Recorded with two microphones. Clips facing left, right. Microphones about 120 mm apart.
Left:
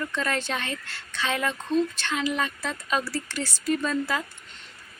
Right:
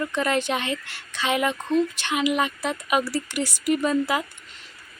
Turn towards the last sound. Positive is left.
turn(degrees=-15)  # may be behind; listen again after turning